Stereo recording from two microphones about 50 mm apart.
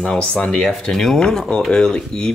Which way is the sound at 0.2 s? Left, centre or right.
Left.